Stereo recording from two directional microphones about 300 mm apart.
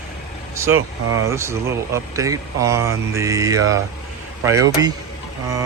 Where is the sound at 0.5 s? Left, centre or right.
Centre.